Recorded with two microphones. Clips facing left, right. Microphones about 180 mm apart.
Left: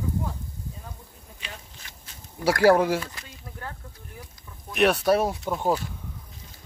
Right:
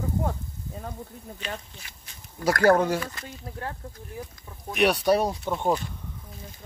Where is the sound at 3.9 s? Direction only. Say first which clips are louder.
Right 6 dB; 45° right (ahead or behind).